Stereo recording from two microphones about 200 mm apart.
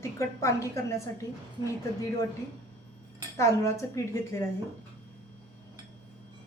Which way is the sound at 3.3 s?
15° left (ahead or behind).